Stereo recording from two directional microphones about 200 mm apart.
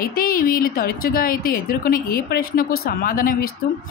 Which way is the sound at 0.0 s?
45° left (ahead or behind).